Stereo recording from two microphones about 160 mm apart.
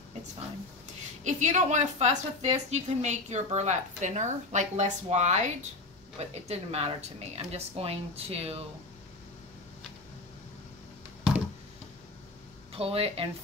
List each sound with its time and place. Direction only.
1.2 s speech: 50° right (ahead or behind)
12.7 s speech: 40° right (ahead or behind)